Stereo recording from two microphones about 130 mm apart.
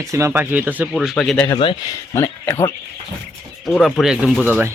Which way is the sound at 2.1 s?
20° left (ahead or behind).